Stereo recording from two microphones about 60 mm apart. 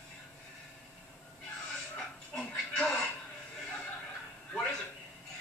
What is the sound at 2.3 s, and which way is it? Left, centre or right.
Television, centre.